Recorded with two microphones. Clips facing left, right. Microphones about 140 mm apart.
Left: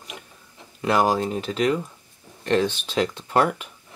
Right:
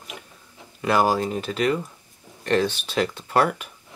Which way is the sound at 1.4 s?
15° left (ahead or behind).